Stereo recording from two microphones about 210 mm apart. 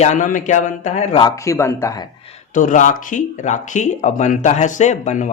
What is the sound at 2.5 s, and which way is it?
Speech, 35° left (ahead or behind).